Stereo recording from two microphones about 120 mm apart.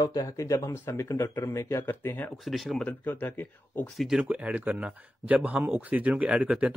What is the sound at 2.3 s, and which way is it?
Speech, centre (ahead or behind).